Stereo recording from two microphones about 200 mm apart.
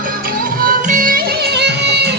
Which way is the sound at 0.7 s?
40° right (ahead or behind).